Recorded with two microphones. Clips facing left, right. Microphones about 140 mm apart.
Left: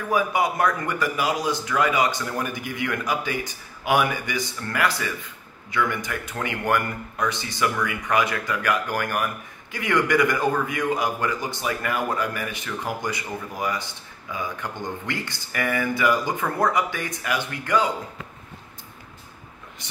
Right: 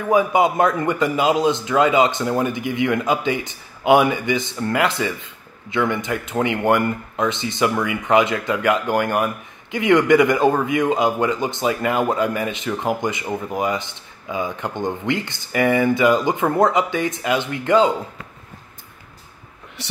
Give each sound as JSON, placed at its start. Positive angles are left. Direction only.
{"t": 0.1, "sound": "speech", "side_deg": -20}
{"t": 19.8, "sound": "speech", "side_deg": -75}